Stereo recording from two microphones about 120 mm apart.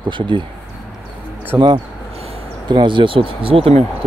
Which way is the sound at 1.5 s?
15° right (ahead or behind).